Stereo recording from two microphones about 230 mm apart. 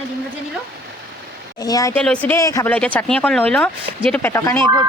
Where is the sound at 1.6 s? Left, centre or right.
Centre.